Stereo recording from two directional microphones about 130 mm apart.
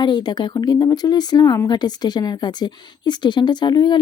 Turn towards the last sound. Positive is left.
turn(degrees=35)  # may be behind; listen again after turning